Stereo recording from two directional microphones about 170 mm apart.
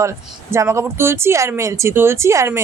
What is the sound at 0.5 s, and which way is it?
A woman's voice, 15° right (ahead or behind).